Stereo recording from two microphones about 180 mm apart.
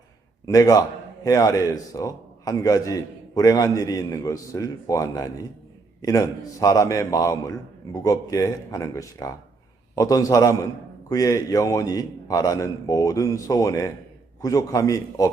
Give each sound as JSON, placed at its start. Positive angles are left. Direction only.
{"t": 0.4, "sound": "a man's voice", "side_deg": 20}